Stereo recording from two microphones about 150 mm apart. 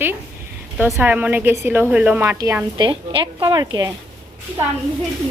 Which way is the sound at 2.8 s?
30° right (ahead or behind).